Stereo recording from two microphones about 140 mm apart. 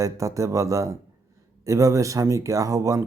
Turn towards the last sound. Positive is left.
turn(degrees=-20)  # may be behind; listen again after turning